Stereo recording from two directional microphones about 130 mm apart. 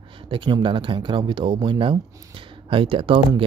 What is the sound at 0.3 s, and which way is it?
Speech, 40° right (ahead or behind).